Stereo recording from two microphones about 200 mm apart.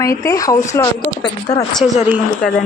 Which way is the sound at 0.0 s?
15° left (ahead or behind).